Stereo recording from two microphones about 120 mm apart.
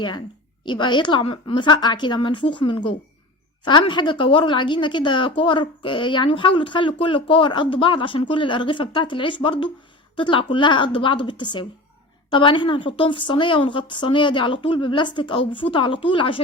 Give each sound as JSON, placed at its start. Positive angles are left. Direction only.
{"t": 0.6, "sound": "a woman's voice", "side_deg": 40}